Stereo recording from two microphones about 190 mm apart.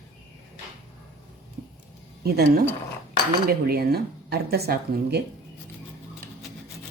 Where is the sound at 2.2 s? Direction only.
55° right (ahead or behind).